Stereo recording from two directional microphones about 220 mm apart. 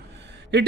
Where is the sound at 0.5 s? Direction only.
50° right (ahead or behind).